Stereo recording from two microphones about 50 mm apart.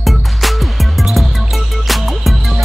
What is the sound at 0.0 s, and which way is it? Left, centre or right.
Music, centre.